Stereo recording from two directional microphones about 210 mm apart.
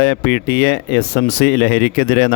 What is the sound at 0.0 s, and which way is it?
Speech, 50° left (ahead or behind).